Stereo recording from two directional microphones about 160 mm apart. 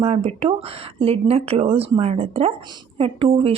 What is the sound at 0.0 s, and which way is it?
Speech, 40° right (ahead or behind).